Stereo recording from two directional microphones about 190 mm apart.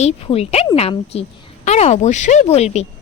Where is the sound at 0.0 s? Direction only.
30° left (ahead or behind).